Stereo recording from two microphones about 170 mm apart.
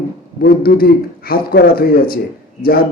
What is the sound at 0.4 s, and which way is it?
Speech, 60° left (ahead or behind).